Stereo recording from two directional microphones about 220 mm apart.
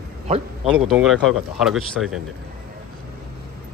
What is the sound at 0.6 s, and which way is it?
Speech, centre (ahead or behind).